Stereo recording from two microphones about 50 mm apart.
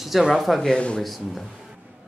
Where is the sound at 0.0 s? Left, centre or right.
Centre.